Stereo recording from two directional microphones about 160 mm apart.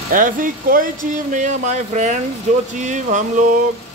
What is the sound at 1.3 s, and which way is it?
Speech, 50° right (ahead or behind).